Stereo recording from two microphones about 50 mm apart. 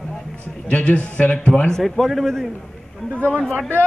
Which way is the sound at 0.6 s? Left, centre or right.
Left.